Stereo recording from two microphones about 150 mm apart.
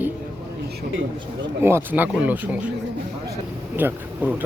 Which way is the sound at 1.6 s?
15° right (ahead or behind).